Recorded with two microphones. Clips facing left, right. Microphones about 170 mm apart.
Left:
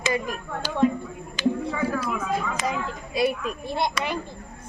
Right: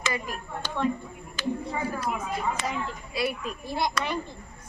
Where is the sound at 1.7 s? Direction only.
90° left.